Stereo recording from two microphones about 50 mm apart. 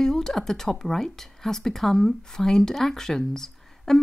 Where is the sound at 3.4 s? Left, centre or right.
Centre.